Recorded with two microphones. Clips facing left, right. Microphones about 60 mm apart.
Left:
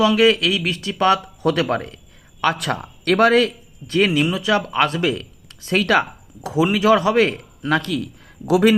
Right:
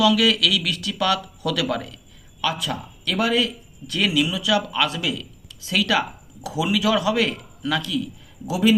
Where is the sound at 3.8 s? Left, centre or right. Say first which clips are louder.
Left 4 dB; left.